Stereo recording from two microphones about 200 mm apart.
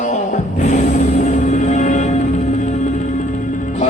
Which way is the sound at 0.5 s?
35° left (ahead or behind).